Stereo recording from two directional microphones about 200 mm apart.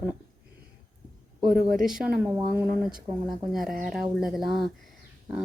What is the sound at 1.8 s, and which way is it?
Speech, 5° right (ahead or behind).